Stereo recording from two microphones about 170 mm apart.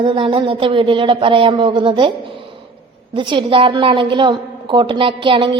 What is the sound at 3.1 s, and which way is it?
A woman's voice, 30° right (ahead or behind).